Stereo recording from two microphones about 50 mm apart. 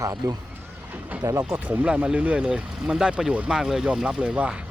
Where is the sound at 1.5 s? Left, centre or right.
Right.